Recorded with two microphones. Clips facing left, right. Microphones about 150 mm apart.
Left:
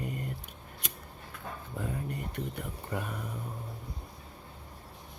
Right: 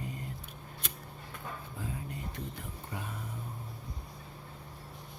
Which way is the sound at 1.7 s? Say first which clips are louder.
Left 7 dB; 60° left (ahead or behind).